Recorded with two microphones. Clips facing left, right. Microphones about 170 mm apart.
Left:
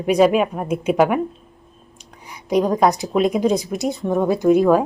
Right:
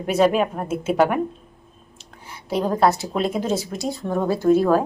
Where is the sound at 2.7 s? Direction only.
15° left (ahead or behind).